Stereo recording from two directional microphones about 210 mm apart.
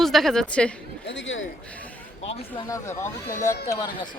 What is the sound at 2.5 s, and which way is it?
Speech, 15° left (ahead or behind).